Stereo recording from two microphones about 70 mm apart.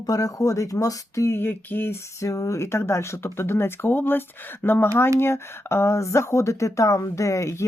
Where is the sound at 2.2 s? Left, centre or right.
Left.